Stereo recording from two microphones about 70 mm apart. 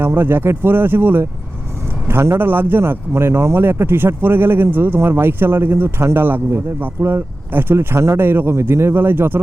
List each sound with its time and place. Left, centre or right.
0.0 s a man's voice: right